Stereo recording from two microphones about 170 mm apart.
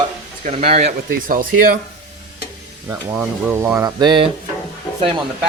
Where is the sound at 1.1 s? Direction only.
55° right (ahead or behind).